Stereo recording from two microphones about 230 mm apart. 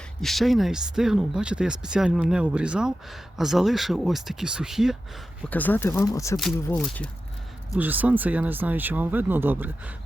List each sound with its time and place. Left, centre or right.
0.2 s speech: centre
6.4 s speech: centre
7.8 s speech: centre